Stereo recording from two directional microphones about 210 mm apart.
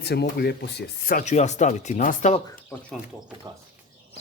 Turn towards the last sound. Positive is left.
turn(degrees=-20)  # may be behind; listen again after turning